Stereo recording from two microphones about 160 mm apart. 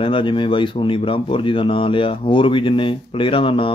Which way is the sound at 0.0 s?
30° left (ahead or behind).